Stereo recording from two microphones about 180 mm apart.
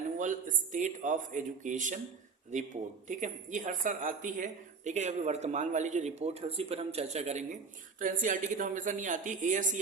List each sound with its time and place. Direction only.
0.2 s a woman's voice: 45° right (ahead or behind)
3.1 s a woman's voice: 45° right (ahead or behind)